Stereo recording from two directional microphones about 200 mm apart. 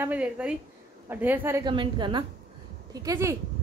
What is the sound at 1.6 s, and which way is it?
A woman's voice, 25° right (ahead or behind).